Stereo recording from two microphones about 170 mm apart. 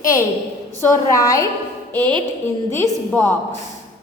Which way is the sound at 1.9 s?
10° left (ahead or behind).